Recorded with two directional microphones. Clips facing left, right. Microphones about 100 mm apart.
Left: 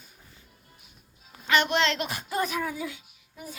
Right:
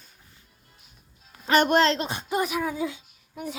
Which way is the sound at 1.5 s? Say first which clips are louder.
Right 4 dB; 45° right (ahead or behind).